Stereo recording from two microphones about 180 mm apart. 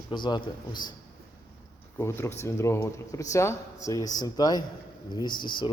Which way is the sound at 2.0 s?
15° left (ahead or behind).